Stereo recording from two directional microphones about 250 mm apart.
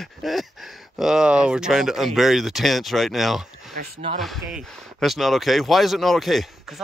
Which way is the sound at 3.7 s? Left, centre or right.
Right.